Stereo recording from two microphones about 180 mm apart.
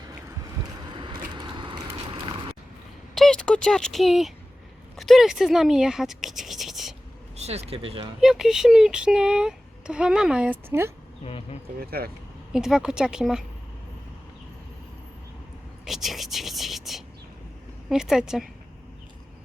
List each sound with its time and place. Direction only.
0.9 s vehicle: 25° right (ahead or behind)
2.2 s boat: 30° right (ahead or behind)
3.2 s a sound: 5° left (ahead or behind)
4.9 s speech: centre (ahead or behind)
7.3 s speech: 35° right (ahead or behind)
8.2 s speech: 5° right (ahead or behind)
11.3 s speech: 30° left (ahead or behind)
11.8 s speech: 60° right (ahead or behind)
12.5 s speech: 5° right (ahead or behind)
15.8 s a sound: centre (ahead or behind)
17.8 s speech: 5° right (ahead or behind)